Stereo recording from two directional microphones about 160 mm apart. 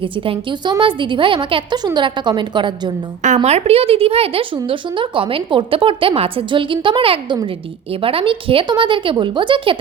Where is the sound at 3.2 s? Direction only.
45° right (ahead or behind).